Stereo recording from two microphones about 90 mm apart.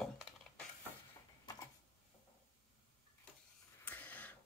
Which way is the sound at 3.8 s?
20° left (ahead or behind).